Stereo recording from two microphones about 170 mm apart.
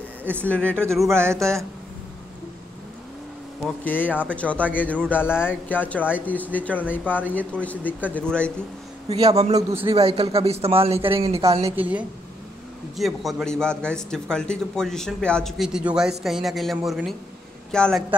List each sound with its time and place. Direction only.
0.2 s speech: 10° right (ahead or behind)
0.5 s speech: 5° left (ahead or behind)
1.1 s speech: 15° right (ahead or behind)
3.6 s speech: 10° left (ahead or behind)
9.1 s speech: 35° right (ahead or behind)
9.6 s speech: 15° right (ahead or behind)
9.8 s speech: 35° right (ahead or behind)
11.6 s a man's voice: 10° right (ahead or behind)